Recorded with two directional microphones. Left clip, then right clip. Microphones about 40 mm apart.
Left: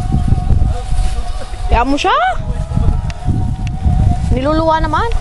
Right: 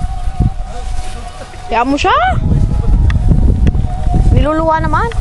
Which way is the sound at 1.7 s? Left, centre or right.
Right.